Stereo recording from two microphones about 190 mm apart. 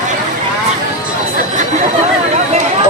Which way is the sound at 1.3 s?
40° right (ahead or behind).